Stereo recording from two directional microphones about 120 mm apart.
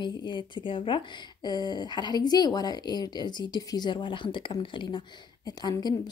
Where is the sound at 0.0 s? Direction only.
40° left (ahead or behind).